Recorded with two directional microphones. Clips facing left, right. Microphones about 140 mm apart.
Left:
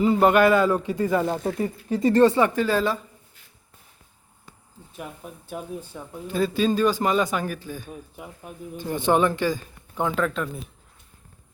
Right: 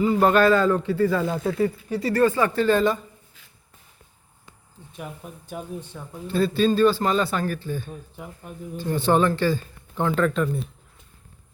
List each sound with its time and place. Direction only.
0.0 s speech: 20° left (ahead or behind)
2.6 s a woman's voice: 5° left (ahead or behind)
4.9 s a man's voice: centre (ahead or behind)
10.2 s a woman's voice: centre (ahead or behind)